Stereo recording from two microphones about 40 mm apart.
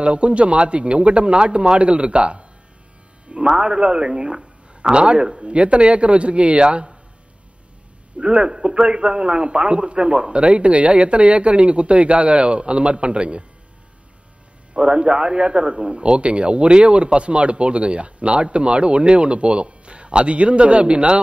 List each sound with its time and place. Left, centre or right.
0.0 s a man's voice: right
8.2 s a man's voice: right
14.7 s a man's voice: right